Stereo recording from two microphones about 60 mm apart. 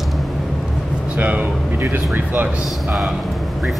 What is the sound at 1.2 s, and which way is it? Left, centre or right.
Speech, right.